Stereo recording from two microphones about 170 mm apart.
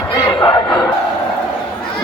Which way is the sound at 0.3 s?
30° left (ahead or behind).